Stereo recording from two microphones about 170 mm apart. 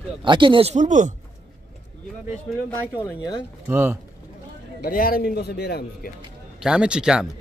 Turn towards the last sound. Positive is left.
turn(degrees=-5)  # may be behind; listen again after turning